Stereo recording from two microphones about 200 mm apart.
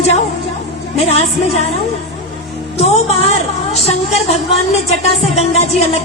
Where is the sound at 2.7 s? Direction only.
30° left (ahead or behind).